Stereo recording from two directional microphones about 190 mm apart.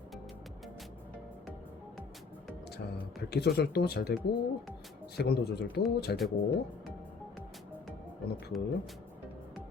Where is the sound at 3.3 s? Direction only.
55° left (ahead or behind).